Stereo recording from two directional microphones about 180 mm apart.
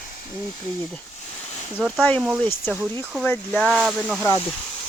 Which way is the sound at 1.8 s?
5° left (ahead or behind).